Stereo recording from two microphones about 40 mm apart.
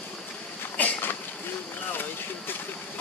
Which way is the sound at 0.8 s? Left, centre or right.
Left.